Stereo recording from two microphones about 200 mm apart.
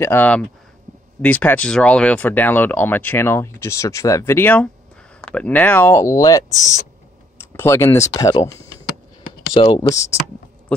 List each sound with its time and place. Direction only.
0.0 s speech: 10° left (ahead or behind)
7.5 s speech: 15° left (ahead or behind)
9.6 s speech: 25° left (ahead or behind)